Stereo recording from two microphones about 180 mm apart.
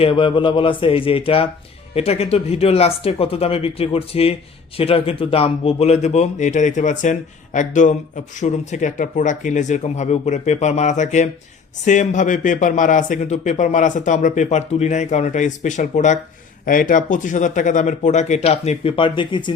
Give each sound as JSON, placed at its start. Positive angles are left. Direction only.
{"t": 0.0, "sound": "speech", "side_deg": 30}